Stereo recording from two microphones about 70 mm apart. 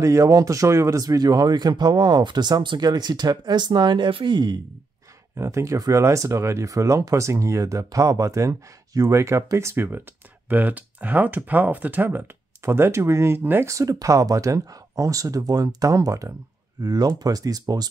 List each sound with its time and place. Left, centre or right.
0.0 s speech: right
5.3 s speech: right
10.5 s speech: right
13.7 s speech: right
16.8 s speech: right